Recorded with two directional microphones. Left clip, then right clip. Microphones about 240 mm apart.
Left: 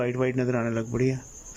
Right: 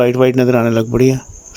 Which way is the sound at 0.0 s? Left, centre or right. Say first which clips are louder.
Right 15 dB; right.